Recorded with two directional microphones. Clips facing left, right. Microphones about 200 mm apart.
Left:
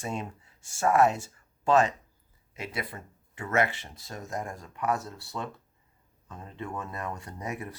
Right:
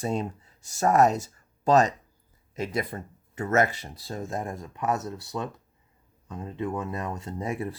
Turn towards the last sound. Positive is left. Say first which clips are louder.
# right 6 dB
turn(degrees=-30)  # may be behind; listen again after turning